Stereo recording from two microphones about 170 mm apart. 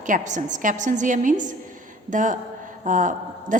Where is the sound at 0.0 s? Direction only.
45° right (ahead or behind).